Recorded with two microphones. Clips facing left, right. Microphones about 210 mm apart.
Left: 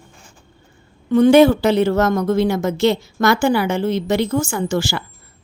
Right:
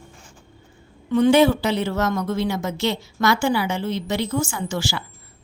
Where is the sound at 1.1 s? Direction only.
50° left (ahead or behind).